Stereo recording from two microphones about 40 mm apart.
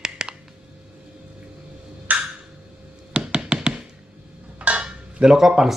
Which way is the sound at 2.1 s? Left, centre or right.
Right.